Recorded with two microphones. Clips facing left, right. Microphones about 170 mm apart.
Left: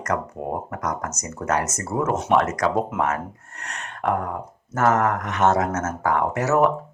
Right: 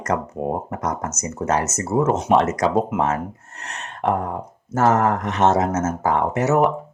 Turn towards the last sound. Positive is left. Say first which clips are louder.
# right 2 dB
turn(degrees=-20)  # may be behind; listen again after turning